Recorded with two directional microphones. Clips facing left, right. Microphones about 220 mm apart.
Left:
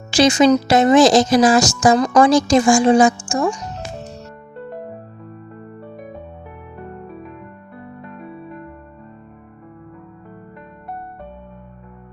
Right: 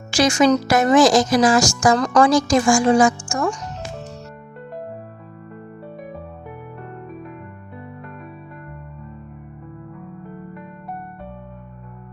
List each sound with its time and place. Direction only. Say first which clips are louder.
0.1 s speech: left 3 dB; 20° left (ahead or behind)